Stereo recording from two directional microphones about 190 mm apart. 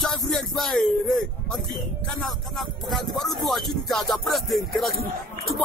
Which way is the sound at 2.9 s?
Centre (ahead or behind).